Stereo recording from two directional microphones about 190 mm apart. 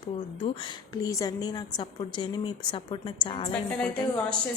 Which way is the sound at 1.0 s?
20° left (ahead or behind).